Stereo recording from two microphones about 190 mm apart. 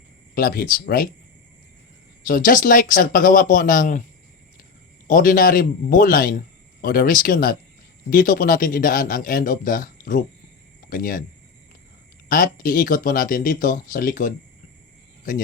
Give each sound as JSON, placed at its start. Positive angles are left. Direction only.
{"t": 0.3, "sound": "speech", "side_deg": 50}
{"t": 2.2, "sound": "speech", "side_deg": 45}
{"t": 5.0, "sound": "speech", "side_deg": 45}
{"t": 12.3, "sound": "speech", "side_deg": 45}